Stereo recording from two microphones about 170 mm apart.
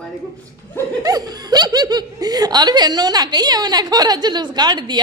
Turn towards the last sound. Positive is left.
turn(degrees=-25)  # may be behind; listen again after turning